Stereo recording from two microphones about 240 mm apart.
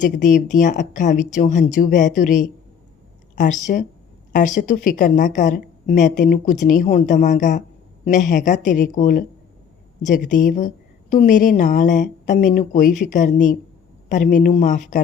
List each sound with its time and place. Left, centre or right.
0.0 s a woman's voice: left